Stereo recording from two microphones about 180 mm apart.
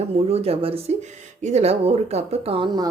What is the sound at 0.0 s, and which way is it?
A woman's voice, 35° right (ahead or behind).